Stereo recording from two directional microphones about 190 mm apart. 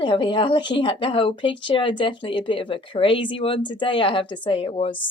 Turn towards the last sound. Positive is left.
turn(degrees=30)  # may be behind; listen again after turning